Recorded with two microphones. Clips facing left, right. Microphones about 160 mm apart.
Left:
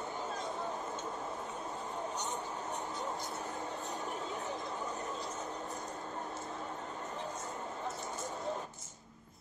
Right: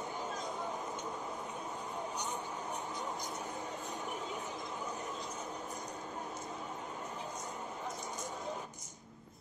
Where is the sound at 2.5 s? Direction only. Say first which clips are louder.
Left 1 dB; 15° right (ahead or behind).